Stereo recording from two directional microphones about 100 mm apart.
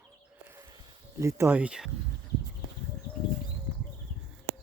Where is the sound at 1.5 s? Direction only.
10° right (ahead or behind).